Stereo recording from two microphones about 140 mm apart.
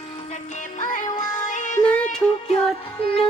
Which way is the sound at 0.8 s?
65° left (ahead or behind).